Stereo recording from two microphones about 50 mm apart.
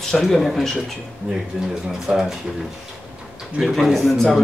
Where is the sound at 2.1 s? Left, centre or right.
Right.